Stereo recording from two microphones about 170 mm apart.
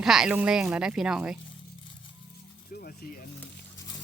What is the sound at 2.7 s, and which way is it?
Speech, 60° left (ahead or behind).